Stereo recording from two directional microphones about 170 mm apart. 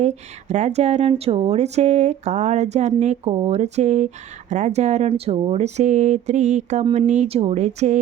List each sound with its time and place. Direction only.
0.0 s a woman's voice: 45° right (ahead or behind)